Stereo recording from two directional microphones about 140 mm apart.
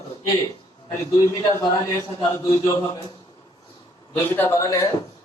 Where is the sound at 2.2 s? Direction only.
35° left (ahead or behind).